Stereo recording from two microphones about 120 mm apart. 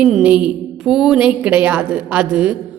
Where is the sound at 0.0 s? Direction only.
5° right (ahead or behind).